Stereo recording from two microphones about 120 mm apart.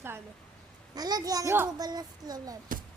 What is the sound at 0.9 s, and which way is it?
A child's voice, 35° right (ahead or behind).